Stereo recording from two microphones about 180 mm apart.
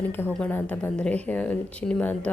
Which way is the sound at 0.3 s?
5° left (ahead or behind).